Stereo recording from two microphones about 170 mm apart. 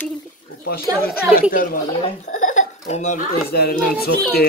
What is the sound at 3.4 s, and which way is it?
Speech, 65° left (ahead or behind).